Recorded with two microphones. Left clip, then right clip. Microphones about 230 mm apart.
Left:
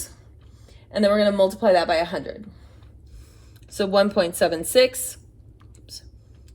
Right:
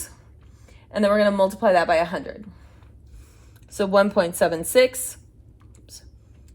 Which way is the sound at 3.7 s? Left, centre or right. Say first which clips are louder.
Right 1 dB; right.